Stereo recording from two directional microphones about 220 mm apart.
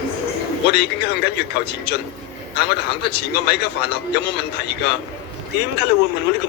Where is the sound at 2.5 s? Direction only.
50° left (ahead or behind).